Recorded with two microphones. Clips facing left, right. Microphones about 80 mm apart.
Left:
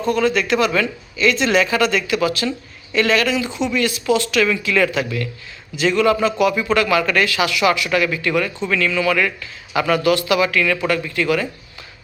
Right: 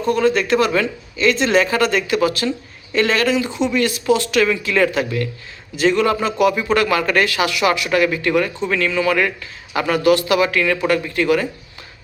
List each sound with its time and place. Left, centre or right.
0.1 s speech: right